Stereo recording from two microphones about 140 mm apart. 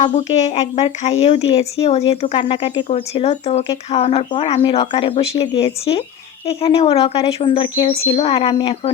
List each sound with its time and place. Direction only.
0.0 s speech: 55° left (ahead or behind)